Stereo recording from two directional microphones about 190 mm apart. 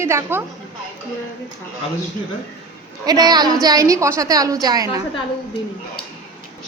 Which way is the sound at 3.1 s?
20° right (ahead or behind).